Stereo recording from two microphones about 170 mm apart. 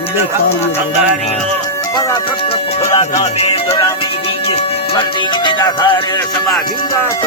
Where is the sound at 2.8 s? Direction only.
20° left (ahead or behind).